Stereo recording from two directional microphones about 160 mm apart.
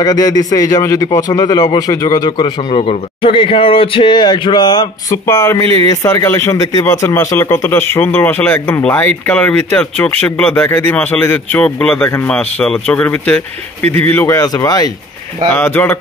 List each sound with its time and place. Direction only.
0.0 s a man's voice: 25° left (ahead or behind)
15.5 s speech: 15° left (ahead or behind)